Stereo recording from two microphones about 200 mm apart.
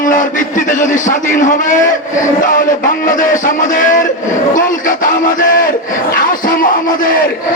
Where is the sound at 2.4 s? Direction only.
45° left (ahead or behind).